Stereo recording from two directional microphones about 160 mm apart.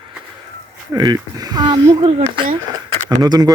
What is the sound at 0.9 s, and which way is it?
Speech, 25° right (ahead or behind).